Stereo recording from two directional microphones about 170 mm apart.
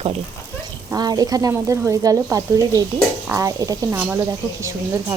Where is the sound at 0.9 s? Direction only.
20° right (ahead or behind).